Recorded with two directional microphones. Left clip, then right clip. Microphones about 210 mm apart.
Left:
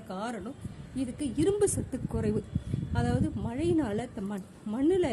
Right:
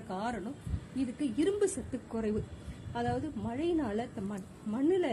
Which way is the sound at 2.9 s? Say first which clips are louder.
Left 2 dB; 35° left (ahead or behind).